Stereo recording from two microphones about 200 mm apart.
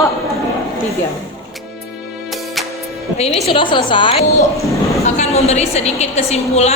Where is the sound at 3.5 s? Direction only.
25° left (ahead or behind).